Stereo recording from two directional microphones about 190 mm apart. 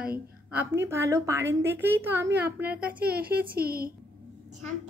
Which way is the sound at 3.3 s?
55° right (ahead or behind).